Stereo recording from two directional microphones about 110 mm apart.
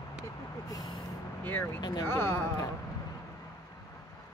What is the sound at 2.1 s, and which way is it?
Speech, 20° left (ahead or behind).